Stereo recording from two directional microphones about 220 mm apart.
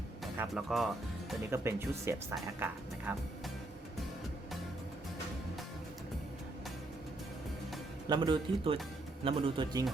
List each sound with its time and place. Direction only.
0.3 s speech: centre (ahead or behind)
1.5 s speech: 10° right (ahead or behind)
8.0 s speech: 20° right (ahead or behind)